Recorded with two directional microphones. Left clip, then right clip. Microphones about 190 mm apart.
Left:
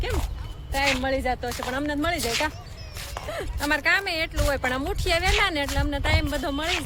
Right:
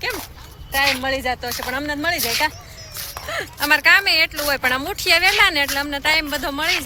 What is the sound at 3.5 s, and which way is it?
Speech, 10° right (ahead or behind).